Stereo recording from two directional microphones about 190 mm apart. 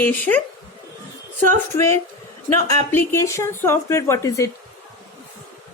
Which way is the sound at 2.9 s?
15° left (ahead or behind).